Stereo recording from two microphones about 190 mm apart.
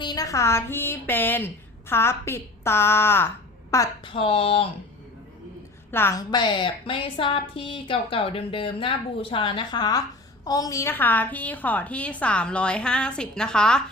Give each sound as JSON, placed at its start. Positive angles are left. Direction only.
{"t": 0.0, "sound": "a woman's voice", "side_deg": 20}
{"t": 4.0, "sound": "a woman's voice", "side_deg": 30}
{"t": 5.9, "sound": "a woman's voice", "side_deg": 10}